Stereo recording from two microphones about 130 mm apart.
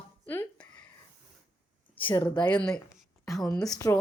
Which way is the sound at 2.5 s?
5° left (ahead or behind).